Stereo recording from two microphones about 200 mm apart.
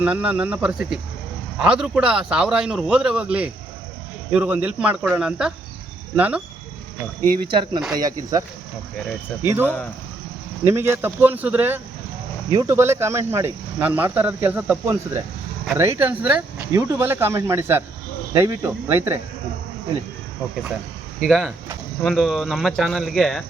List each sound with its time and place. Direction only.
0.0 s a man's voice: 5° right (ahead or behind)
7.4 s speech: 25° right (ahead or behind)
9.6 s speech: 5° left (ahead or behind)
10.6 s speech: 10° right (ahead or behind)
21.2 s a man's voice: 5° left (ahead or behind)